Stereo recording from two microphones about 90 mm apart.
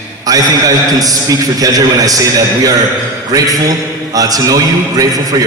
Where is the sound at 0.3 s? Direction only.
45° right (ahead or behind).